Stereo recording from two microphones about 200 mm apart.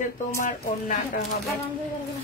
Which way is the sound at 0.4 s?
40° left (ahead or behind).